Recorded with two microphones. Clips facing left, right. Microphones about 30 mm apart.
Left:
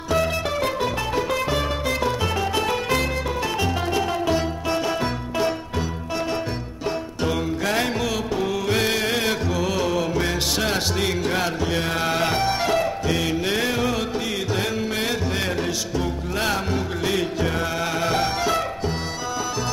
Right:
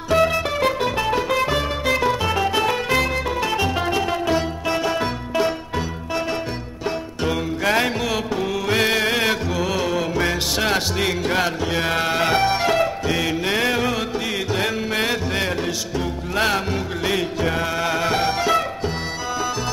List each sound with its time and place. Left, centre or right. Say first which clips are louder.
0.1 s music: right 4 dB; right
8.0 s music: right 1 dB; centre
9.5 s music: right 1 dB; centre; by 16.6 s right
16.7 s music: right 1 dB; centre